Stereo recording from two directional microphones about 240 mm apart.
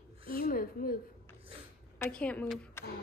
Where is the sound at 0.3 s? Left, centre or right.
Left.